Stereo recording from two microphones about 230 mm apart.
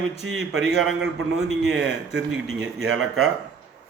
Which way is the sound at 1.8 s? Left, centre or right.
Right.